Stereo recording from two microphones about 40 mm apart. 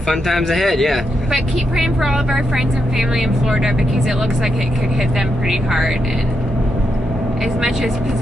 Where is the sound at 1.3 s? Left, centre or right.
Centre.